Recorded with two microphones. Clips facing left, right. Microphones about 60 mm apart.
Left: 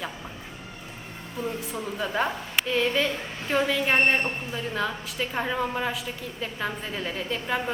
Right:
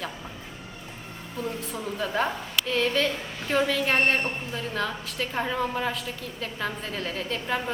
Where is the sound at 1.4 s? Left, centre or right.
Centre.